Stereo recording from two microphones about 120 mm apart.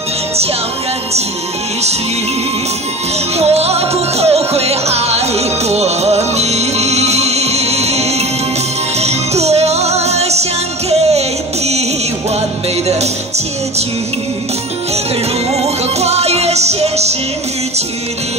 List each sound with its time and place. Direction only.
3.3 s music: 60° right (ahead or behind)
15.5 s music: 60° right (ahead or behind)